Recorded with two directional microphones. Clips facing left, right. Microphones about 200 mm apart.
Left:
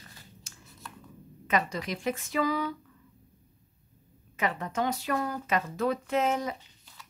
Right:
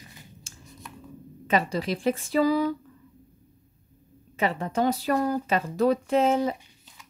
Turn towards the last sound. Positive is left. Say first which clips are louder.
# right 6 dB
turn(degrees=-30)  # may be behind; listen again after turning